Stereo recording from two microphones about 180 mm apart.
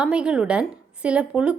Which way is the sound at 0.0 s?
5° right (ahead or behind).